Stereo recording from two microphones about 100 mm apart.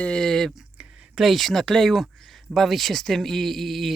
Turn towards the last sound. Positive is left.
turn(degrees=0)  # may be behind; listen again after turning